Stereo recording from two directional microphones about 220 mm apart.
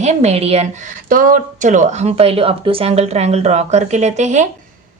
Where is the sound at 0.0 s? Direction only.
30° right (ahead or behind).